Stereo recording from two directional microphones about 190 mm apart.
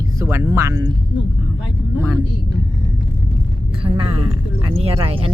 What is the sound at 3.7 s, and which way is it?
Speech, 30° right (ahead or behind).